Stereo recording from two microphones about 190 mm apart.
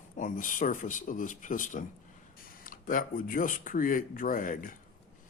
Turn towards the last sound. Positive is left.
turn(degrees=45)  # may be behind; listen again after turning